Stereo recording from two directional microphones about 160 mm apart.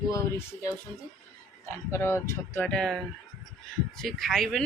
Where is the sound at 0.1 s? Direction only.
20° left (ahead or behind).